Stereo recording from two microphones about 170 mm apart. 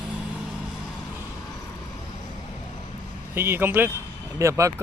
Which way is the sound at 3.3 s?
15° right (ahead or behind).